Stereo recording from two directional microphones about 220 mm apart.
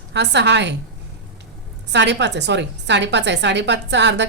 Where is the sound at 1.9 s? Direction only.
50° right (ahead or behind).